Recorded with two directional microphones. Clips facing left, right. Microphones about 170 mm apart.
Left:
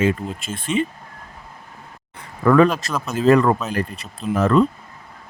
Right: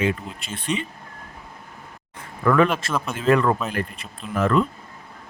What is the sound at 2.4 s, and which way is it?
Speech, 40° left (ahead or behind).